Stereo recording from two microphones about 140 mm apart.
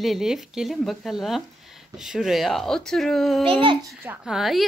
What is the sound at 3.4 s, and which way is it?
Speech, 40° right (ahead or behind).